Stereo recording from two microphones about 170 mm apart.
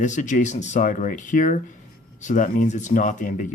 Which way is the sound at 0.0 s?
45° left (ahead or behind).